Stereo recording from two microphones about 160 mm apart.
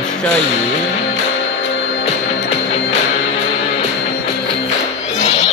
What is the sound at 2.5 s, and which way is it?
Music, 45° left (ahead or behind).